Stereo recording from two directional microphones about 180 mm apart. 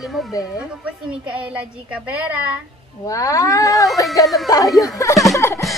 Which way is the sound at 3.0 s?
20° left (ahead or behind).